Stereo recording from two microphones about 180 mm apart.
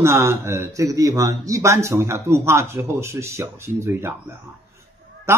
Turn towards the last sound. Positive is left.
turn(degrees=-15)  # may be behind; listen again after turning